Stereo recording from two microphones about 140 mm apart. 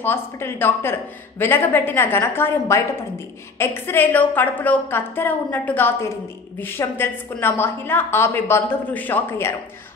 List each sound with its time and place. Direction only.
0.0 s a woman's voice: 15° left (ahead or behind)